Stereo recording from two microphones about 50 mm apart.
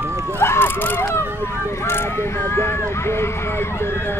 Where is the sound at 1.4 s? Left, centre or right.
Left.